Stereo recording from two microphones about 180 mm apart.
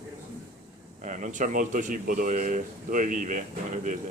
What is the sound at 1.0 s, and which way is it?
A man's voice, 45° right (ahead or behind).